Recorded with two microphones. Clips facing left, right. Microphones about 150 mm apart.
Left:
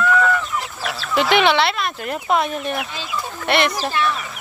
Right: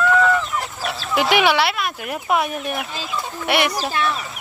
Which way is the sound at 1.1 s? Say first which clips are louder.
Left 1 dB; 10° right (ahead or behind).